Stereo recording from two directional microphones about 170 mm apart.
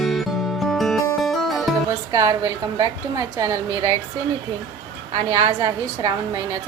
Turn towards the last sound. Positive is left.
turn(degrees=-20)  # may be behind; listen again after turning